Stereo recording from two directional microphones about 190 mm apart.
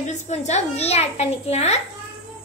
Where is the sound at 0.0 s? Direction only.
35° left (ahead or behind).